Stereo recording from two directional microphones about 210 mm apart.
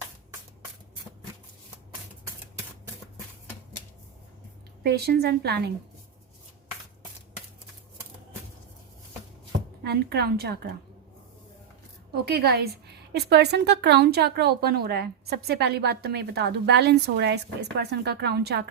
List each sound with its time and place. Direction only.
4.8 s speech: 50° right (ahead or behind)
9.8 s speech: 50° right (ahead or behind)
12.1 s speech: 50° right (ahead or behind)